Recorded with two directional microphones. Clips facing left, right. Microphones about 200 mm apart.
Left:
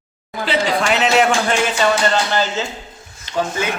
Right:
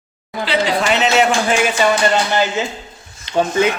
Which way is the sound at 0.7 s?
Centre (ahead or behind).